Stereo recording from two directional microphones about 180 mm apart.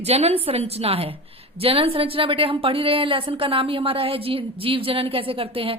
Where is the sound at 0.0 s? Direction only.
35° right (ahead or behind).